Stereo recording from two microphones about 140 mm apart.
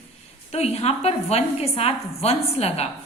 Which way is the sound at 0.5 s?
50° left (ahead or behind).